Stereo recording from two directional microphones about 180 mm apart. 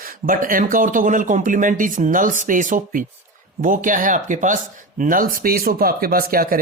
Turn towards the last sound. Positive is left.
turn(degrees=-55)  # may be behind; listen again after turning